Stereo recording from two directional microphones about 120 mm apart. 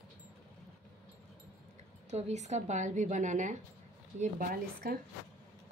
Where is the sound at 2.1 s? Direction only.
70° right (ahead or behind); by 3.5 s 90° right.